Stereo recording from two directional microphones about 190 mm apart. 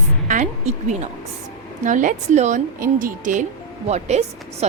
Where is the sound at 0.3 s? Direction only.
40° right (ahead or behind).